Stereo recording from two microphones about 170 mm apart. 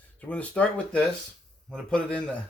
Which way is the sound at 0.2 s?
5° left (ahead or behind).